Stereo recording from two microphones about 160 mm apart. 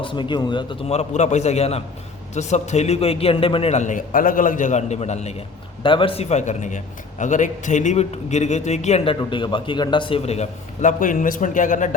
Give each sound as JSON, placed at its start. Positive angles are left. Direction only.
{"t": 0.0, "sound": "a man's voice", "side_deg": 30}
{"t": 5.8, "sound": "a man's voice", "side_deg": 30}